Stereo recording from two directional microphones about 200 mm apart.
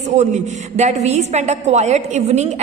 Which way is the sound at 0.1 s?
35° right (ahead or behind).